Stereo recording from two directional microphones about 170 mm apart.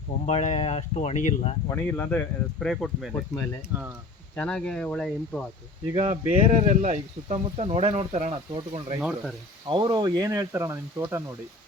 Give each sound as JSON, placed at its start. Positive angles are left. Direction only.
{"t": 0.3, "sound": "speech", "side_deg": 40}
{"t": 1.7, "sound": "speech", "side_deg": 10}
{"t": 3.7, "sound": "speech", "side_deg": -10}
{"t": 4.4, "sound": "speech", "side_deg": 5}
{"t": 5.9, "sound": "speech", "side_deg": -35}
{"t": 9.6, "sound": "speech", "side_deg": -25}